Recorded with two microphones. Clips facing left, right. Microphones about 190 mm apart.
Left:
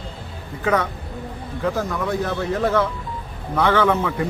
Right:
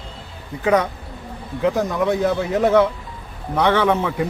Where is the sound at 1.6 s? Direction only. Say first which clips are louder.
Right 4 dB; 20° right (ahead or behind).